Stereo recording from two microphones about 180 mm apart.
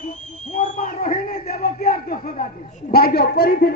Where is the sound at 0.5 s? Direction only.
45° left (ahead or behind).